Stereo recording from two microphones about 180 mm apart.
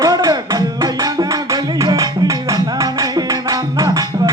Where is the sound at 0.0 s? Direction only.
20° right (ahead or behind).